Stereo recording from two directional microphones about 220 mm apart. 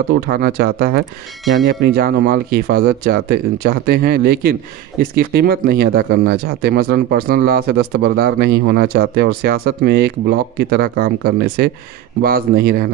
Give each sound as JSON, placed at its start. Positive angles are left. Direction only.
{"t": 0.3, "sound": "speech", "side_deg": -45}